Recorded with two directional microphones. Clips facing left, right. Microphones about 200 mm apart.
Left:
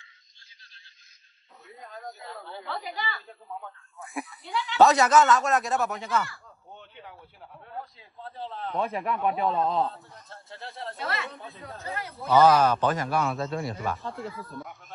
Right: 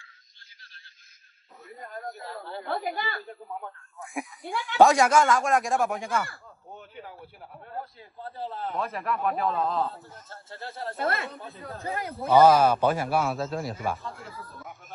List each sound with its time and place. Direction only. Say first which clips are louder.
2.2 s a man's voice: right 3 dB; 5° right (ahead or behind)
2.6 s a woman's voice: right 4 dB; 55° right (ahead or behind)
3.3 s speech: right 2 dB; 15° right (ahead or behind)
4.5 s speech: left 2 dB; 50° right (ahead or behind)
4.7 s a man's voice: even; 10° right (ahead or behind)
8.4 s a man's voice: left 1 dB; 5° right (ahead or behind)
11.0 s speech: right 5 dB; 50° right (ahead or behind)
11.2 s a man's voice: right 2 dB; centre (ahead or behind)